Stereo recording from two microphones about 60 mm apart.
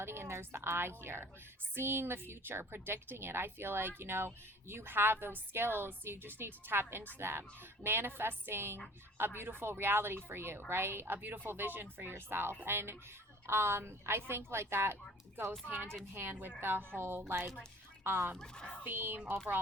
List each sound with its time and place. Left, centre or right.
0.0 s a woman's voice: right
16.1 s speech: right
18.3 s speech: centre
18.8 s speech: right